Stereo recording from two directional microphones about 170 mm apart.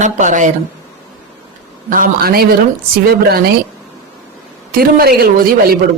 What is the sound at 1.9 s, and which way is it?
A woman's voice, 60° right (ahead or behind).